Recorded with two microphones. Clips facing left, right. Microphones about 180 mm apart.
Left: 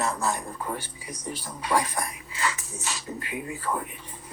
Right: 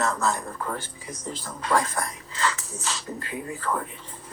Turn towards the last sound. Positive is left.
turn(degrees=15)  # may be behind; listen again after turning